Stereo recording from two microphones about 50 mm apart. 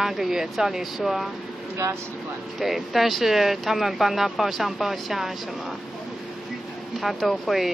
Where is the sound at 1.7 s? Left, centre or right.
Right.